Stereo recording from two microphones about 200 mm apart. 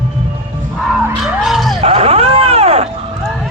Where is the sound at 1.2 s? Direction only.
Centre (ahead or behind).